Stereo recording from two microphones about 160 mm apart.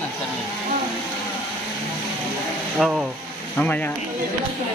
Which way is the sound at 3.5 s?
10° left (ahead or behind).